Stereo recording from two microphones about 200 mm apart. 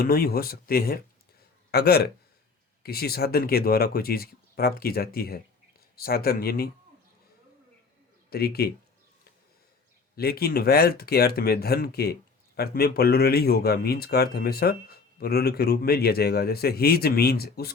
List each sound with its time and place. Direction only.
0.0 s a man's voice: 50° left (ahead or behind)
8.3 s a man's voice: 50° left (ahead or behind)
10.2 s a man's voice: 50° left (ahead or behind)